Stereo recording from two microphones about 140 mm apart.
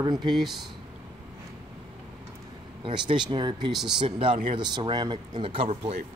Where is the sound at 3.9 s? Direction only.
35° right (ahead or behind).